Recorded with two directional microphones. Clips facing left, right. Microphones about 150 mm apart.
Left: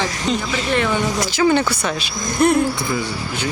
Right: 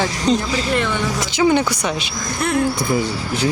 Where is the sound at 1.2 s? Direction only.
20° right (ahead or behind).